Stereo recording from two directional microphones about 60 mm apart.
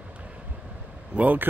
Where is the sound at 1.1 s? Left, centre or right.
Right.